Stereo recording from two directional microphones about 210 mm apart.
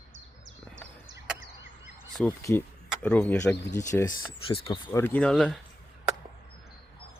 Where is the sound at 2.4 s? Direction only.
10° left (ahead or behind).